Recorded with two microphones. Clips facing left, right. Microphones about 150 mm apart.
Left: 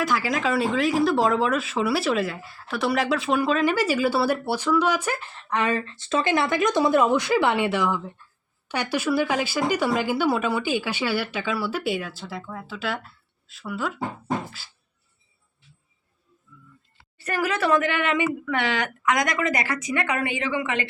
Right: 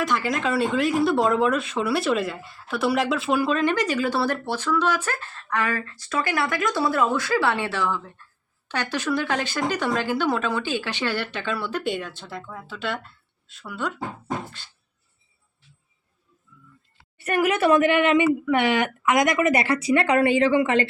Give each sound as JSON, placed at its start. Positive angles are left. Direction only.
{"t": 0.0, "sound": "speech", "side_deg": 0}
{"t": 14.6, "sound": "a sound", "side_deg": 5}
{"t": 17.2, "sound": "speech", "side_deg": -25}